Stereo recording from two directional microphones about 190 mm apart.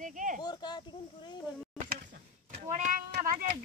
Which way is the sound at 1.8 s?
45° right (ahead or behind).